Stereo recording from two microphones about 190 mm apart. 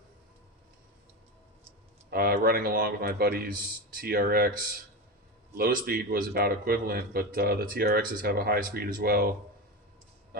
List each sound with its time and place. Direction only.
2.0 s a man's voice: 55° right (ahead or behind)
5.5 s a man's voice: 55° right (ahead or behind)